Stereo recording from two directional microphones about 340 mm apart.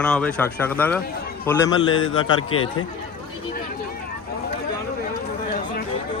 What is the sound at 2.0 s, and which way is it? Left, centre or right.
Speech, left.